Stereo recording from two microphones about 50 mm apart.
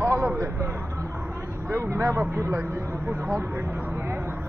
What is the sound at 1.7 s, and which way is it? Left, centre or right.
Speech, right.